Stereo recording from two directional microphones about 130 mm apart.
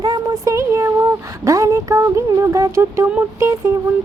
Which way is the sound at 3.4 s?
20° right (ahead or behind).